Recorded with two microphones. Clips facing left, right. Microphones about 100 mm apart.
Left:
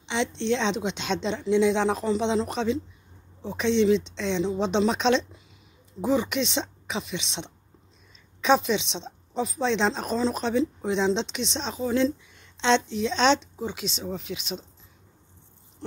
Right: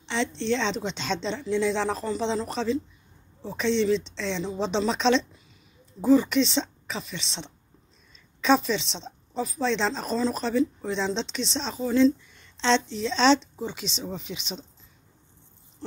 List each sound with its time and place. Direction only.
0.4 s a woman's voice: 5° left (ahead or behind)
8.9 s speech: 15° left (ahead or behind)
9.7 s a woman's voice: 5° left (ahead or behind)
11.0 s a woman's voice: 10° left (ahead or behind)